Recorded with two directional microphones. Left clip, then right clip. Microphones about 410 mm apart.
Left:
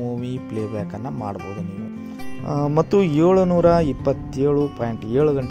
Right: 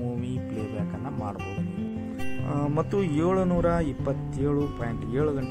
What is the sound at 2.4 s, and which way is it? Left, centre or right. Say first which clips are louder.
Speech: left 8 dB; centre.